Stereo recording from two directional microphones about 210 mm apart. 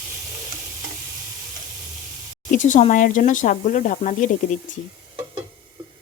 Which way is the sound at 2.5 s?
35° left (ahead or behind).